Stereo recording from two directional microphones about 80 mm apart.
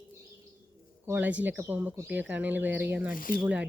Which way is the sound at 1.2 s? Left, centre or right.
Centre.